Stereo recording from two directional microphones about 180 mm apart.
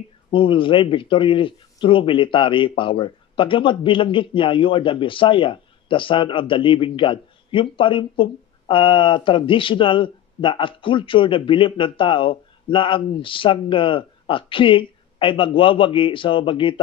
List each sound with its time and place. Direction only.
0.3 s speech: 30° left (ahead or behind)